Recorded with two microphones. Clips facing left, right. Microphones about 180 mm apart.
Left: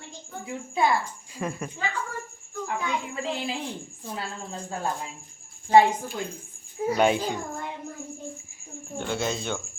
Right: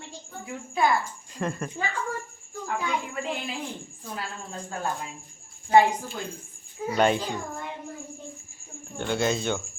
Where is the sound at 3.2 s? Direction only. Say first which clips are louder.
Left 2 dB; 30° left (ahead or behind).